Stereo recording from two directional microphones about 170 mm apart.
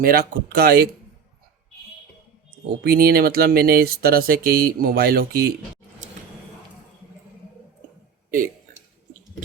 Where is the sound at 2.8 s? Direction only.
65° right (ahead or behind).